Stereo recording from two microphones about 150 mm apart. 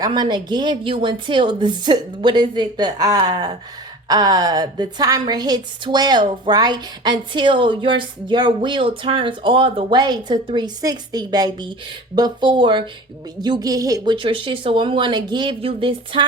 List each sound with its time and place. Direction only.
0.0 s a woman's voice: 30° right (ahead or behind)